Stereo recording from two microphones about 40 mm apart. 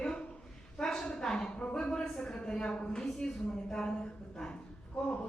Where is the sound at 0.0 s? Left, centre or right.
Left.